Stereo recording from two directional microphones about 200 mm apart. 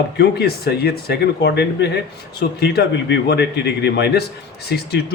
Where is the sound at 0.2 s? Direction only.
50° left (ahead or behind).